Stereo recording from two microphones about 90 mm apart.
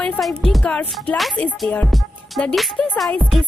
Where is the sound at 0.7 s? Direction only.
15° left (ahead or behind).